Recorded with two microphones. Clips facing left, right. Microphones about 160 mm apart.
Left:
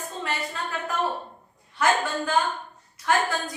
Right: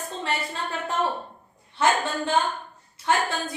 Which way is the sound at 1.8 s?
30° right (ahead or behind).